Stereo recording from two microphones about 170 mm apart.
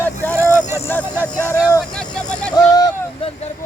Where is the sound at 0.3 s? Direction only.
10° left (ahead or behind).